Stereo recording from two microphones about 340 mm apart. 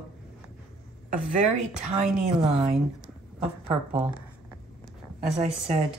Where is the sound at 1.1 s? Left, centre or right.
Right.